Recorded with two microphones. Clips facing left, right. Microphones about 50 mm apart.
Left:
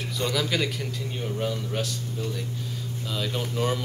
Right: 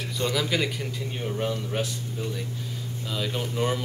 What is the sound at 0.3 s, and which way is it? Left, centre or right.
Speech, centre.